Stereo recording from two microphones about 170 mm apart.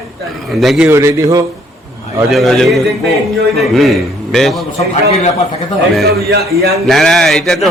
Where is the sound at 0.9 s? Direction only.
15° right (ahead or behind).